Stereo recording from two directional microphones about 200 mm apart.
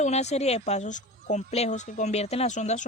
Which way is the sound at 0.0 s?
35° left (ahead or behind).